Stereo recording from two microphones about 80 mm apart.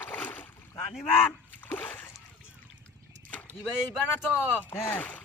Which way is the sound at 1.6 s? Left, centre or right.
Left.